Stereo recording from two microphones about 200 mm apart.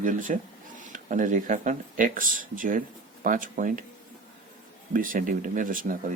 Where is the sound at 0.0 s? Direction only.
40° right (ahead or behind).